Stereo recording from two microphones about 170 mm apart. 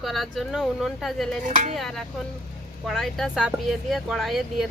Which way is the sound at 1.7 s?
Centre (ahead or behind).